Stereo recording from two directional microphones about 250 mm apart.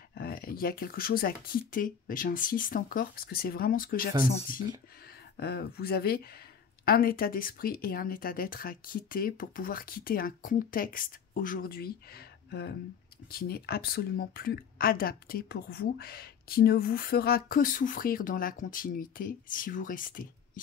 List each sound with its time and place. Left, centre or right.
0.1 s speech: left
5.4 s speech: left